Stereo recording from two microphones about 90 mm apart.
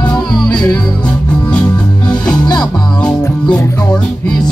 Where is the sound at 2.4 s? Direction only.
50° left (ahead or behind).